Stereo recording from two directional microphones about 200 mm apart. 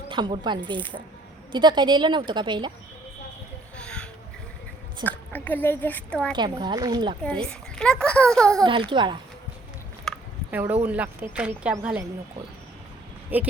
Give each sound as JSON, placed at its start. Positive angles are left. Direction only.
{"t": 0.1, "sound": "a woman's voice", "side_deg": -25}
{"t": 3.8, "sound": "a sound", "side_deg": 5}
{"t": 5.0, "sound": "speech", "side_deg": 10}
{"t": 6.3, "sound": "a woman's voice", "side_deg": -20}
{"t": 7.2, "sound": "a child's voice", "side_deg": 5}
{"t": 8.6, "sound": "a woman's voice", "side_deg": -25}
{"t": 10.1, "sound": "a sound", "side_deg": 0}
{"t": 10.5, "sound": "speech", "side_deg": -10}
{"t": 13.3, "sound": "speech", "side_deg": -10}